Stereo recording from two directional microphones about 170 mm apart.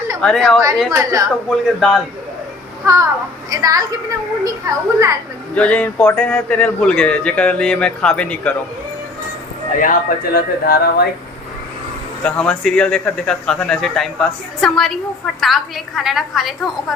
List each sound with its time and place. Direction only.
0.2 s a man's voice: 5° left (ahead or behind)
0.9 s speech: 20° right (ahead or behind)
1.5 s a man's voice: centre (ahead or behind)
2.8 s a child's voice: 15° right (ahead or behind)
5.5 s a man's voice: 5° left (ahead or behind)
9.7 s speech: 50° left (ahead or behind)
12.2 s a man's voice: 5° left (ahead or behind)